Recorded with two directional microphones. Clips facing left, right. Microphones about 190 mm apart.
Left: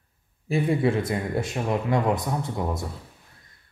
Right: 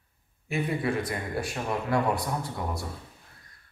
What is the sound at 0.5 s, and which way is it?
A man's voice, 25° left (ahead or behind).